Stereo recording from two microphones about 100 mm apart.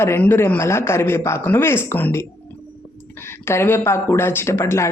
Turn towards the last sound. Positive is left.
turn(degrees=25)  # may be behind; listen again after turning